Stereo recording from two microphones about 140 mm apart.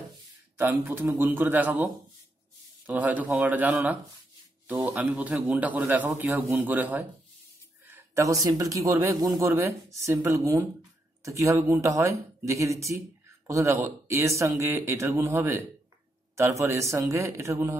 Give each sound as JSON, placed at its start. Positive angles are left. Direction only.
{"t": 0.6, "sound": "a man's voice", "side_deg": -15}
{"t": 2.9, "sound": "a man's voice", "side_deg": -10}
{"t": 7.9, "sound": "a sound", "side_deg": -20}
{"t": 8.5, "sound": "speech", "side_deg": -25}